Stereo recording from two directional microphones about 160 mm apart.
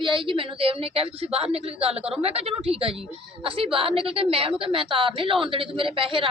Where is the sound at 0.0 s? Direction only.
30° right (ahead or behind).